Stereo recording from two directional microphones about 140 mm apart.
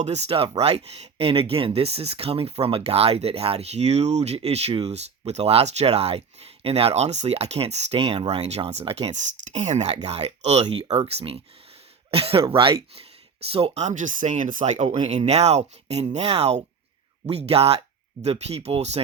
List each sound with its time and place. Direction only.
0.0 s speech: 50° right (ahead or behind)
9.0 s speech: 55° right (ahead or behind)